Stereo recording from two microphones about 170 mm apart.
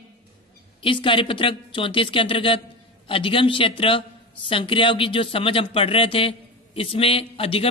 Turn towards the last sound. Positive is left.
turn(degrees=35)  # may be behind; listen again after turning